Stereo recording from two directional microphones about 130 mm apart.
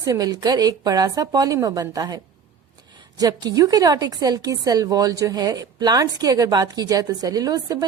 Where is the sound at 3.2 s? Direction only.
30° right (ahead or behind).